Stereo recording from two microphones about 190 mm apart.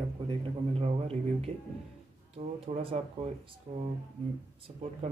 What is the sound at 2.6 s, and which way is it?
Speech, 30° right (ahead or behind).